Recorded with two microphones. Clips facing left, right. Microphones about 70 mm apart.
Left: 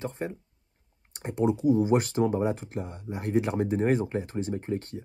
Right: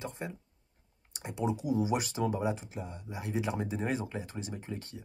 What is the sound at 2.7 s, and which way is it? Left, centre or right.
Speech, left.